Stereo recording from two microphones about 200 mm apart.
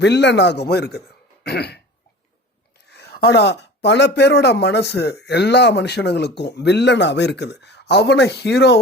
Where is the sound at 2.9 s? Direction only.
55° left (ahead or behind).